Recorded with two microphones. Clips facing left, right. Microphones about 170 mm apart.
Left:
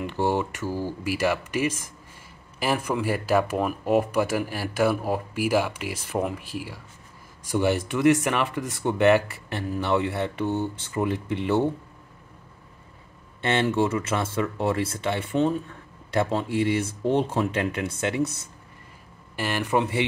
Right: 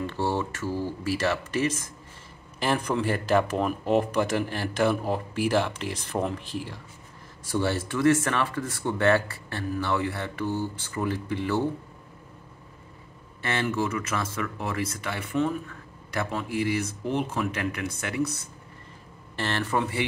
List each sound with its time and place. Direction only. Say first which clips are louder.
0.0 s speech: left 3 dB; 15° left (ahead or behind)
13.4 s speech: left 5 dB; 25° left (ahead or behind)
19.3 s speech: left 3 dB; 10° left (ahead or behind)